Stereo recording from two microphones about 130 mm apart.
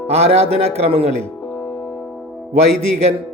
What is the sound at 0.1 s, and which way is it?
A man's voice, 55° right (ahead or behind).